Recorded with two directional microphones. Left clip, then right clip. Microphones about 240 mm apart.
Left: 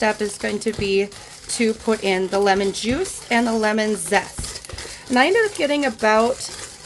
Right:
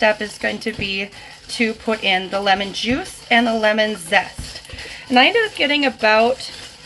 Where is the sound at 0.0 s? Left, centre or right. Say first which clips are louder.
Right 4 dB; left.